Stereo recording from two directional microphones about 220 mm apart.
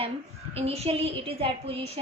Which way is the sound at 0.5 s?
30° right (ahead or behind).